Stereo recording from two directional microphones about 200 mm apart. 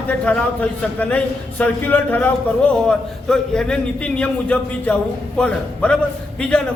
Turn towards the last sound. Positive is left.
turn(degrees=5)  # may be behind; listen again after turning